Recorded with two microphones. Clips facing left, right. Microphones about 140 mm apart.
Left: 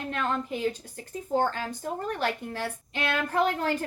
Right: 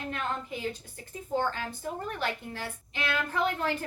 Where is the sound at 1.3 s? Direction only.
45° left (ahead or behind).